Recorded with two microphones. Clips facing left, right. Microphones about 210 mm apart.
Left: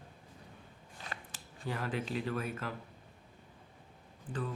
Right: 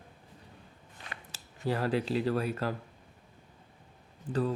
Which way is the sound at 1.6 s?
35° right (ahead or behind).